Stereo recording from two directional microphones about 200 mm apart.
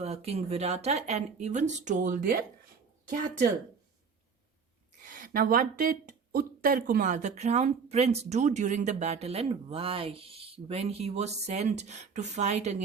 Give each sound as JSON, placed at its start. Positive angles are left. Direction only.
{"t": 0.0, "sound": "speech", "side_deg": -30}
{"t": 5.0, "sound": "speech", "side_deg": -45}